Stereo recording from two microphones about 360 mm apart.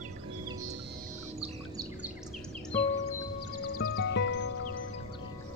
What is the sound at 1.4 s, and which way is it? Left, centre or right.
Bird, centre.